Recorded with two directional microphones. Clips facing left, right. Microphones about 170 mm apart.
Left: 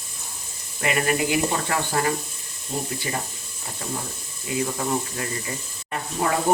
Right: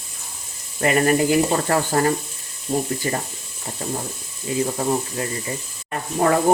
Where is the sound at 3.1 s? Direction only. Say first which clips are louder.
Right 3 dB; 40° right (ahead or behind).